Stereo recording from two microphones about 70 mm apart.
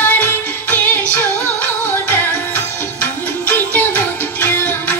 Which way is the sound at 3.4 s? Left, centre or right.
Left.